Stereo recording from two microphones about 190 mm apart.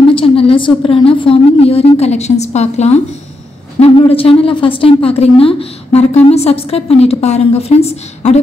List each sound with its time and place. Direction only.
0.1 s a woman's voice: 30° left (ahead or behind)